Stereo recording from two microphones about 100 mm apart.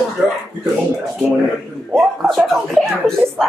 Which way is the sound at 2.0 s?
Centre (ahead or behind).